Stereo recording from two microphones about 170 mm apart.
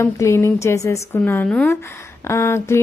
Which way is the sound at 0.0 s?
15° left (ahead or behind).